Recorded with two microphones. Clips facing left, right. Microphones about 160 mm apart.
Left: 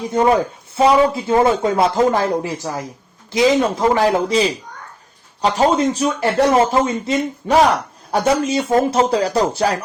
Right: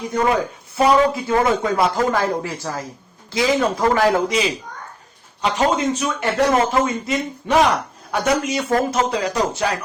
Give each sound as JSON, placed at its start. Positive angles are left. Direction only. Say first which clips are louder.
{"t": 0.1, "sound": "speech", "louder": "left 4 dB", "side_deg": 25}
{"t": 4.3, "sound": "a man's voice", "louder": "left 4 dB", "side_deg": 35}